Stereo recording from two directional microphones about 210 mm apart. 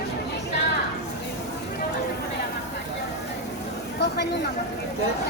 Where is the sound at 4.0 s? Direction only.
55° left (ahead or behind).